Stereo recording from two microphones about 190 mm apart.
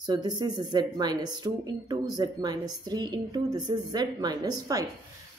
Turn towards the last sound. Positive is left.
turn(degrees=-20)  # may be behind; listen again after turning